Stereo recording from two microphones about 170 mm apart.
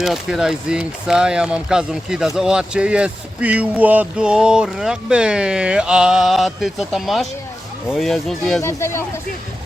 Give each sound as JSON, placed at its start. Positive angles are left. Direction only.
{"t": 0.0, "sound": "speech", "side_deg": -5}
{"t": 8.6, "sound": "speech", "side_deg": 15}